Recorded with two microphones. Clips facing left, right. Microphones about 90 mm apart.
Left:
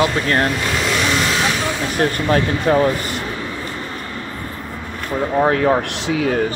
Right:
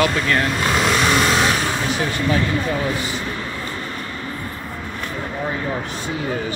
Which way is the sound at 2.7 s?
50° left (ahead or behind).